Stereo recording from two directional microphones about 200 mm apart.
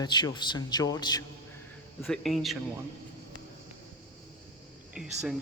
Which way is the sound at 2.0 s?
Centre (ahead or behind).